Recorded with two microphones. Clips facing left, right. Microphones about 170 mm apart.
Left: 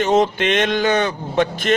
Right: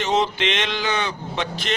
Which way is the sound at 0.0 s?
50° left (ahead or behind).